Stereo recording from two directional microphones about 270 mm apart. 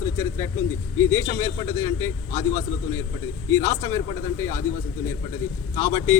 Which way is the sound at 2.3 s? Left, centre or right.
Centre.